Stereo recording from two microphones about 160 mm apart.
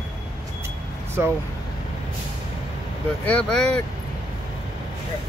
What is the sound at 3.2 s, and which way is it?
Speech, 10° left (ahead or behind).